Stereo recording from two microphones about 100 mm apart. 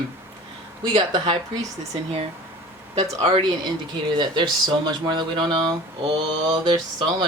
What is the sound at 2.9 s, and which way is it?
Speech, 90° right.